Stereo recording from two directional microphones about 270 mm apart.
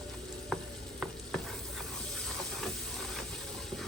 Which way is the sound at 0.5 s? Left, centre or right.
Centre.